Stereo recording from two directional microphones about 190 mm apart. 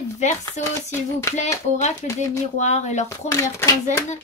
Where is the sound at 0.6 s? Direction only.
35° left (ahead or behind).